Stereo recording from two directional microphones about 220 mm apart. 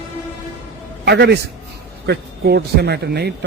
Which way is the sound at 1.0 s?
50° right (ahead or behind).